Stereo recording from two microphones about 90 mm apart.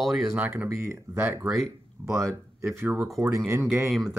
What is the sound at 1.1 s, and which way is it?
Speech, 20° right (ahead or behind).